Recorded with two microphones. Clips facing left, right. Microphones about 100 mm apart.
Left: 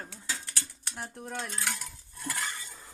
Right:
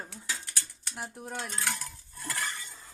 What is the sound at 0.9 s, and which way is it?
Speech, 5° right (ahead or behind).